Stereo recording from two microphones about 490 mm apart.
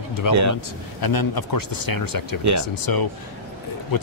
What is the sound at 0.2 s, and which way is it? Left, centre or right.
Speech, left.